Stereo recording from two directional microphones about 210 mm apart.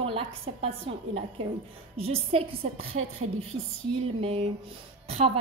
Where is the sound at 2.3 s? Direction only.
25° right (ahead or behind).